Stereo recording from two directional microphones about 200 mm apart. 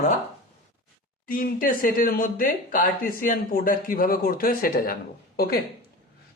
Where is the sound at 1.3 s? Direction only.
45° left (ahead or behind).